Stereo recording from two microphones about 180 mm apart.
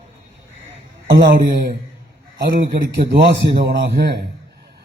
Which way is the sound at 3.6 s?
70° right (ahead or behind).